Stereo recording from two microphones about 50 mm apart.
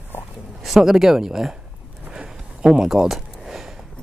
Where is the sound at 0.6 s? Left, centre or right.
Centre.